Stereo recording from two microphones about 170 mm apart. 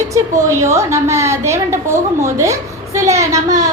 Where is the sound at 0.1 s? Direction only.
15° right (ahead or behind).